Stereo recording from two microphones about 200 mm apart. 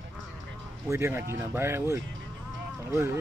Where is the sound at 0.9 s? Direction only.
10° right (ahead or behind).